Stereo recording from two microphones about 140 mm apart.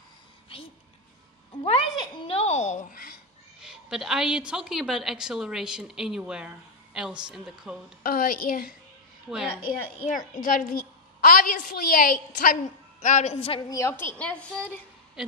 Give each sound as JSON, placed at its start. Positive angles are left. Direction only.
{"t": 1.6, "sound": "a sound", "side_deg": 40}
{"t": 2.2, "sound": "a woman's voice", "side_deg": 50}
{"t": 2.9, "sound": "a woman's voice", "side_deg": 90}
{"t": 3.6, "sound": "a woman's voice", "side_deg": -5}
{"t": 8.0, "sound": "a woman's voice", "side_deg": 90}
{"t": 10.1, "sound": "a woman's voice", "side_deg": 75}
{"t": 12.6, "sound": "a woman's voice", "side_deg": 55}
{"t": 13.7, "sound": "a woman's voice", "side_deg": 20}
{"t": 14.1, "sound": "a woman's voice", "side_deg": 10}
{"t": 15.2, "sound": "a woman's voice", "side_deg": -5}